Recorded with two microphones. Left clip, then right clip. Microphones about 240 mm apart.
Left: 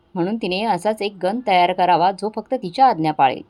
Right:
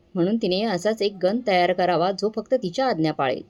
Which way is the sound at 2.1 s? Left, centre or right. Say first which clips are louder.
Even; left.